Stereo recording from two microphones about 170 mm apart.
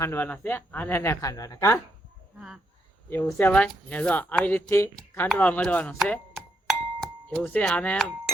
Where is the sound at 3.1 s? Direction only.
15° left (ahead or behind).